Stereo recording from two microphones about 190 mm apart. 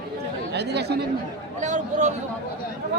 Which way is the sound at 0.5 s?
60° right (ahead or behind).